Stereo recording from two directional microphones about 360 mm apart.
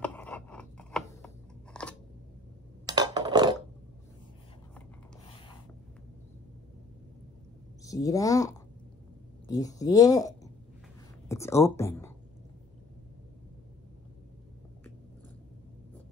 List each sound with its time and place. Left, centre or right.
0.0 s a sound: centre
2.9 s dishes: centre
7.8 s speech: centre
9.5 s speech: centre